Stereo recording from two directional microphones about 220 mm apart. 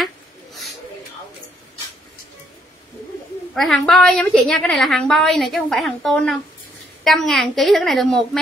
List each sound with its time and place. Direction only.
3.5 s a woman's voice: centre (ahead or behind)